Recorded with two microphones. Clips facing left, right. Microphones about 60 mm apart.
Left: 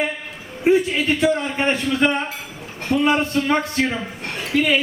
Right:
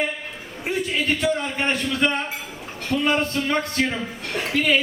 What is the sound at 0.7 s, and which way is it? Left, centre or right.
A man's voice, left.